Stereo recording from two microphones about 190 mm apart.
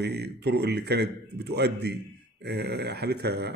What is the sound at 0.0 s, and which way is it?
A man's voice, 60° right (ahead or behind).